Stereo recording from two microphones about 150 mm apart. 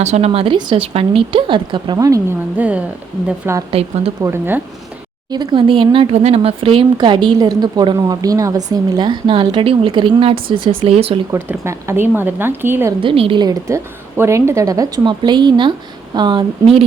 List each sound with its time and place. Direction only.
0.0 s speech: 45° right (ahead or behind); by 2.2 s 25° right (ahead or behind)
2.6 s speech: 10° right (ahead or behind)
3.7 s speech: 40° right (ahead or behind)
4.2 s speech: 15° right (ahead or behind)
5.3 s speech: 30° right (ahead or behind)
11.3 s speech: 20° right (ahead or behind)
13.0 s a woman's voice: 35° right (ahead or behind)